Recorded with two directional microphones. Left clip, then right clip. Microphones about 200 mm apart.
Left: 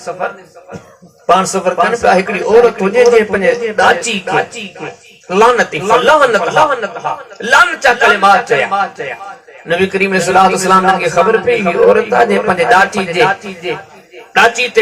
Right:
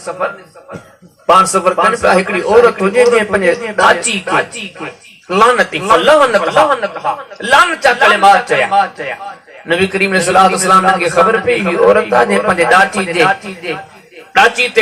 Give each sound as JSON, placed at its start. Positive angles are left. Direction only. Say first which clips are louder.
{"t": 1.4, "sound": "a man's voice", "louder": "right 2 dB", "side_deg": 15}